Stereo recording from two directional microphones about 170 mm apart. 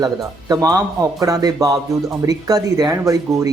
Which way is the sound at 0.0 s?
20° right (ahead or behind).